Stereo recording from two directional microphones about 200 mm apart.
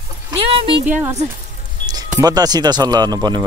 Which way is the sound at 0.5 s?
25° right (ahead or behind).